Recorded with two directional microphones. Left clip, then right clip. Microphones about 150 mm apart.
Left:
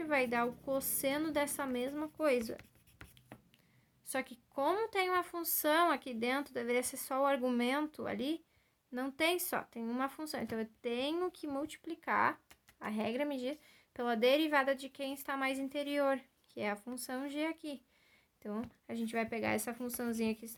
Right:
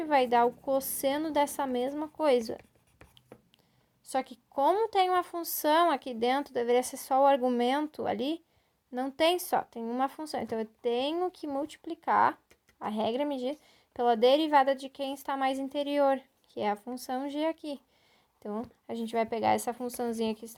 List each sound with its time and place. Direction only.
0.0 s a woman's voice: 30° right (ahead or behind)
4.0 s a woman's voice: 25° right (ahead or behind)
8.9 s a woman's voice: 20° right (ahead or behind)
9.1 s a woman's voice: 30° right (ahead or behind)